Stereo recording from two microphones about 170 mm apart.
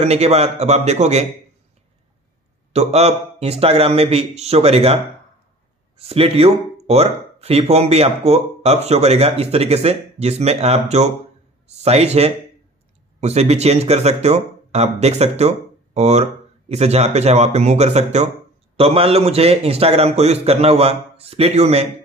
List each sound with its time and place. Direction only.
0.0 s speech: 40° right (ahead or behind)
2.7 s speech: 40° right (ahead or behind)